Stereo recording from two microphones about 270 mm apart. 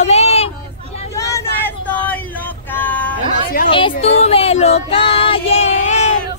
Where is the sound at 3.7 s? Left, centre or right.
Centre.